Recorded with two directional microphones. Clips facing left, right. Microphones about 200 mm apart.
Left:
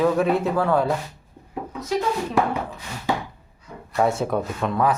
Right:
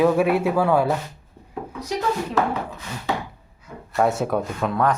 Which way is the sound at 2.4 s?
15° left (ahead or behind).